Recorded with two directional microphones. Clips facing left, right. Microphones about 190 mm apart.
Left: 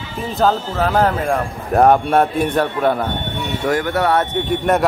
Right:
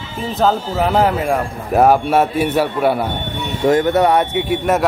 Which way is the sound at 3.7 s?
25° right (ahead or behind).